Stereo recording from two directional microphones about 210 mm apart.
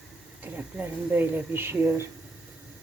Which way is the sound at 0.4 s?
10° right (ahead or behind).